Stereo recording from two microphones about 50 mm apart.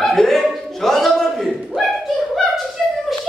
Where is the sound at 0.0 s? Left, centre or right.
Centre.